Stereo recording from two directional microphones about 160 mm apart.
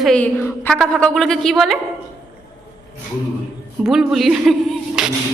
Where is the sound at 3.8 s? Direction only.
Centre (ahead or behind).